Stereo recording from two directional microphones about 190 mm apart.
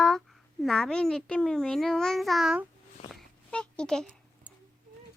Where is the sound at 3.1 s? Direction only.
5° left (ahead or behind).